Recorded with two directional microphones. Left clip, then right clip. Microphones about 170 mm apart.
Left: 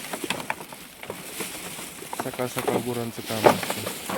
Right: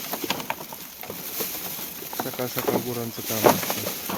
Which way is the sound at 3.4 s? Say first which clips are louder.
Even; 25° right (ahead or behind).